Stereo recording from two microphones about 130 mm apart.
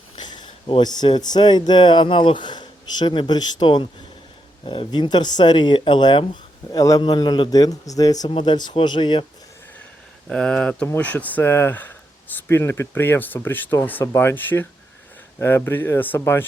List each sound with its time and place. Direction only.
0.2 s a man's voice: 35° left (ahead or behind)
8.3 s speech: 40° left (ahead or behind)
10.2 s speech: 5° left (ahead or behind)